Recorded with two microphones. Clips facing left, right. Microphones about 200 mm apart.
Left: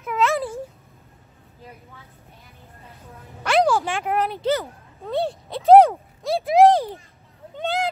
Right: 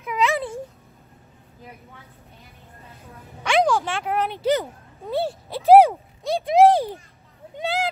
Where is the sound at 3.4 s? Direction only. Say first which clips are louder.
Left 1 dB; 5° left (ahead or behind).